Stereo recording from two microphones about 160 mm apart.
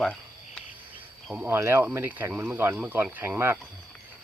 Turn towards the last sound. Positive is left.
turn(degrees=-15)  # may be behind; listen again after turning